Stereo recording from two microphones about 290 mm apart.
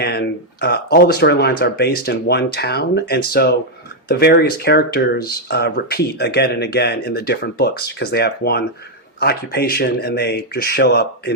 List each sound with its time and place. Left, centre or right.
0.0 s speech: left